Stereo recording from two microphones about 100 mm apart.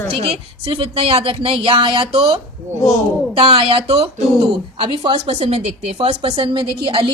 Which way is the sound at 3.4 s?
75° right (ahead or behind).